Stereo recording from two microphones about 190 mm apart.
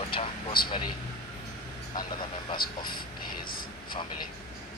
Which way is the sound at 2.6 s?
50° left (ahead or behind).